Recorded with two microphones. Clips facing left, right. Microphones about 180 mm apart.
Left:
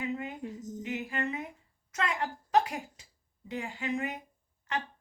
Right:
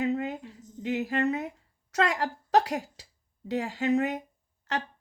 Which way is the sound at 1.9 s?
75° right (ahead or behind).